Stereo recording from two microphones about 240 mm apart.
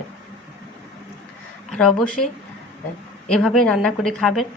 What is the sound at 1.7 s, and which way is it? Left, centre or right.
Speech, centre.